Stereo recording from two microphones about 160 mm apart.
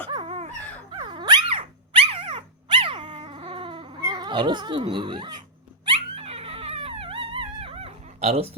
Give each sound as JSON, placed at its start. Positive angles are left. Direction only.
{"t": 0.1, "sound": "dog", "side_deg": -35}